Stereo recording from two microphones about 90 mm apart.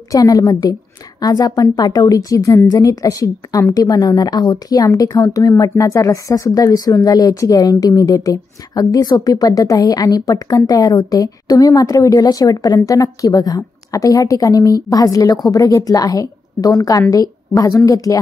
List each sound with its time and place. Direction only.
0.1 s a woman's voice: 40° left (ahead or behind)